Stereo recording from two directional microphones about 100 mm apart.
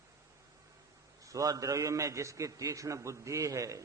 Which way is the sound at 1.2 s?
35° right (ahead or behind).